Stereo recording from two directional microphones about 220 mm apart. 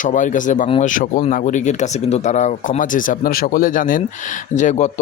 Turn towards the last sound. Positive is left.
turn(degrees=35)  # may be behind; listen again after turning